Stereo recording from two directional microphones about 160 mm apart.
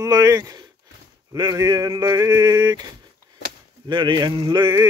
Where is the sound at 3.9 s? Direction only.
30° right (ahead or behind).